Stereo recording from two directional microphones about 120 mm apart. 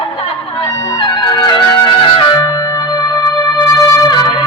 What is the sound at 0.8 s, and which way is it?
Music, 35° left (ahead or behind).